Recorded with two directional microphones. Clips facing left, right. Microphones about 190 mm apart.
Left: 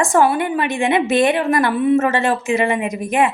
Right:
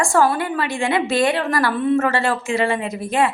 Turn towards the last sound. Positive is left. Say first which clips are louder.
# left 2 dB
turn(degrees=20)  # may be behind; listen again after turning